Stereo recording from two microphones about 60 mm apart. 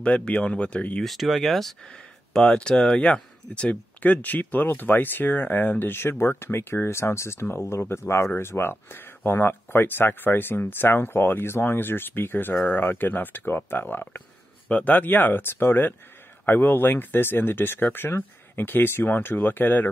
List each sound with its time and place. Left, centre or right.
0.0 s speech: centre
1.0 s speech: centre
1.9 s speech: centre; by 19.9 s left